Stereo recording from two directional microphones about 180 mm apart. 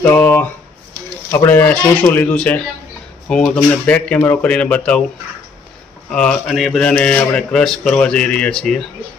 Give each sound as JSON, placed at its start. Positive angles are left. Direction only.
{"t": 0.0, "sound": "a sound", "side_deg": 10}
{"t": 1.3, "sound": "speech", "side_deg": 10}
{"t": 6.0, "sound": "a man's voice", "side_deg": 5}